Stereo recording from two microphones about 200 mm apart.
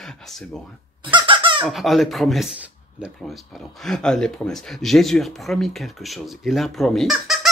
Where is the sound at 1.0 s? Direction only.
25° right (ahead or behind).